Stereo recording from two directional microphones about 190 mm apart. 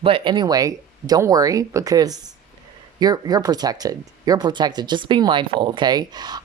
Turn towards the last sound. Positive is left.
turn(degrees=-20)  # may be behind; listen again after turning